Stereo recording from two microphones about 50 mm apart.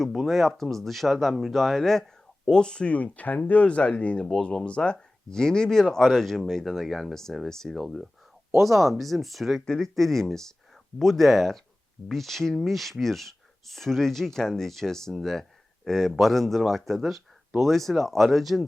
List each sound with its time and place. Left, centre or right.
0.0 s speech: centre; by 4.3 s left
4.3 s speech: centre